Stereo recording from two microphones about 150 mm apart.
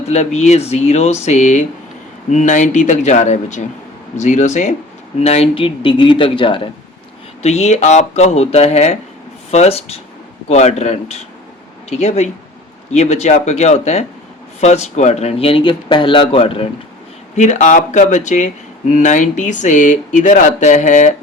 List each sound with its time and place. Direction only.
0.1 s speech: 50° left (ahead or behind)
7.4 s speech: 50° left (ahead or behind)
17.3 s speech: 55° left (ahead or behind)